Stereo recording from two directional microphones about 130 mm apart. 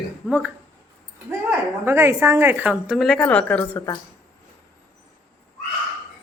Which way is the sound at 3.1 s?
10° left (ahead or behind).